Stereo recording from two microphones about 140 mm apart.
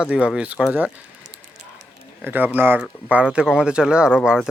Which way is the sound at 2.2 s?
15° right (ahead or behind).